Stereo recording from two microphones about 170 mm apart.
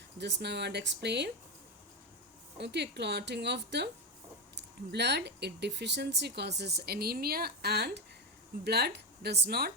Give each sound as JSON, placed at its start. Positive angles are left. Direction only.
{"t": 0.2, "sound": "speech", "side_deg": -90}
{"t": 2.6, "sound": "speech", "side_deg": -85}